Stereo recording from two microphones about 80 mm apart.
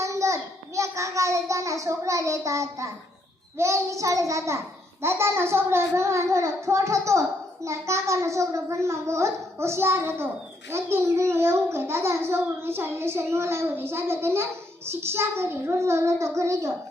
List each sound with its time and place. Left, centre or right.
0.0 s a child's voice: right